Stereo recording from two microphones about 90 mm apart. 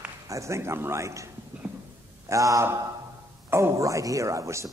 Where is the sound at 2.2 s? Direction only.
35° right (ahead or behind).